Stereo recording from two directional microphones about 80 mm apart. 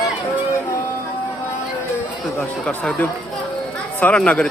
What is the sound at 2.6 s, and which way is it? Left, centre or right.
A man's voice, centre.